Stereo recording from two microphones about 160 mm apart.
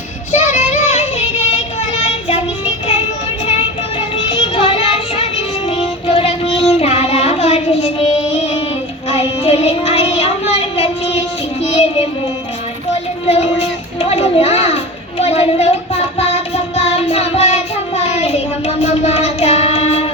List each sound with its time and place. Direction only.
0.3 s child singing: 45° left (ahead or behind)
4.3 s music: 35° left (ahead or behind)
6.7 s child singing: 40° left (ahead or behind)
11.6 s music: 40° left (ahead or behind)
13.2 s child singing: 40° left (ahead or behind)